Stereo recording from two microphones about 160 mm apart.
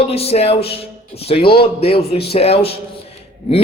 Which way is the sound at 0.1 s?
40° left (ahead or behind).